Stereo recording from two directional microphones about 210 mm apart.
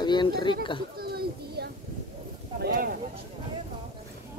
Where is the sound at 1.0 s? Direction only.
50° right (ahead or behind).